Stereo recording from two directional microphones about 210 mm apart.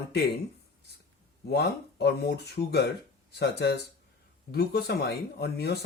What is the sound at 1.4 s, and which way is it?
Speech, 50° left (ahead or behind).